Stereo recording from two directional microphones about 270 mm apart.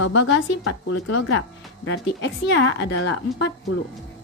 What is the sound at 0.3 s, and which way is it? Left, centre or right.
Speech, left.